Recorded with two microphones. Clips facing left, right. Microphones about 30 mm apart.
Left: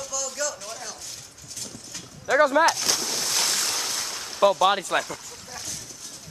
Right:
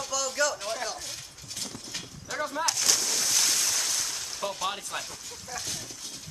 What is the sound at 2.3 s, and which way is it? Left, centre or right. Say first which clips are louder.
Speech: left 13 dB; left.